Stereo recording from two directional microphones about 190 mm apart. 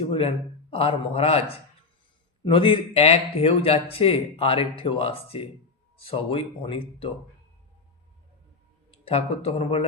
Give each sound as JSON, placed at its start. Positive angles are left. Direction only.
{"t": 0.0, "sound": "speech", "side_deg": 30}
{"t": 8.9, "sound": "speech", "side_deg": 30}